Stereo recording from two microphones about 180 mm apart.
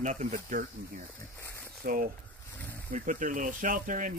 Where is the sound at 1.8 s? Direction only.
50° right (ahead or behind).